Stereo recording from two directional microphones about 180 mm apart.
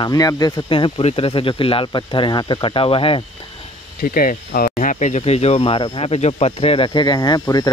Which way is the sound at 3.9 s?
55° left (ahead or behind).